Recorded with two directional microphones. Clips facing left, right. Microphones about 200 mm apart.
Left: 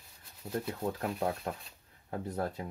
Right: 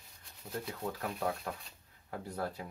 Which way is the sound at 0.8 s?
25° left (ahead or behind).